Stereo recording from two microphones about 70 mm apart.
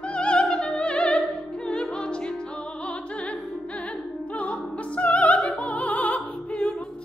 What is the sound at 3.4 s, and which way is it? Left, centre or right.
Music, centre.